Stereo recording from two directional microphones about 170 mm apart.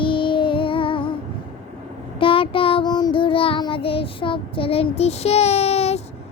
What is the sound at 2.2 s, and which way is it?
Child singing, 30° left (ahead or behind).